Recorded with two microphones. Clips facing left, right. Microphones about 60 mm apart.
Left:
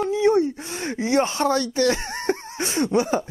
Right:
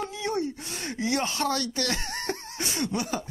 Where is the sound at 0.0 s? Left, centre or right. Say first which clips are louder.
Left 11 dB; left.